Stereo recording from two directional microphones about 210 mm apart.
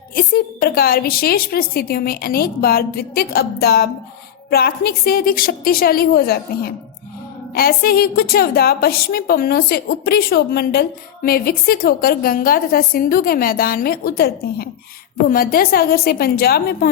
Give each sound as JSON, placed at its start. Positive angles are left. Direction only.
{"t": 0.2, "sound": "a woman's voice", "side_deg": 45}